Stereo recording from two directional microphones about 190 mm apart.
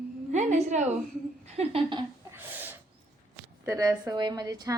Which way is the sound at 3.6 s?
15° right (ahead or behind).